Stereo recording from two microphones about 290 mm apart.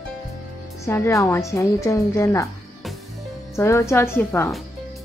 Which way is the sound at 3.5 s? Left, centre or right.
Centre.